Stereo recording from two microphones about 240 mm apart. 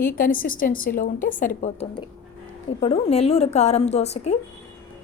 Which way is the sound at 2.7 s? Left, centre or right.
Left.